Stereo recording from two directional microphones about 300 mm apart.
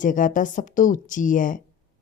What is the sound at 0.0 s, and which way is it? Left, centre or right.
A woman's voice, left.